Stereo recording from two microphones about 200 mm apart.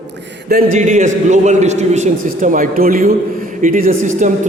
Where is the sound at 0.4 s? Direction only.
50° right (ahead or behind).